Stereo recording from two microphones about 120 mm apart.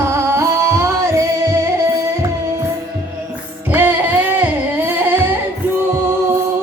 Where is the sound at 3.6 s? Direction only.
15° right (ahead or behind).